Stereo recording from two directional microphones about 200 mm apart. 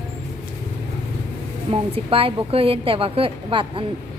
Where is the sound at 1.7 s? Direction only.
30° right (ahead or behind).